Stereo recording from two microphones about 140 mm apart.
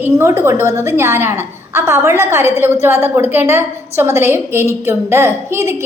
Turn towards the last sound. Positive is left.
turn(degrees=-20)  # may be behind; listen again after turning